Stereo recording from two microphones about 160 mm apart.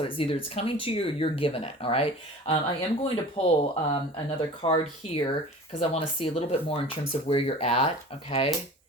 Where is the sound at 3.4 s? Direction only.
40° left (ahead or behind).